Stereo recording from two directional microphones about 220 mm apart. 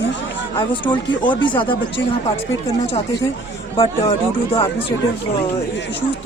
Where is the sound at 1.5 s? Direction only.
20° left (ahead or behind).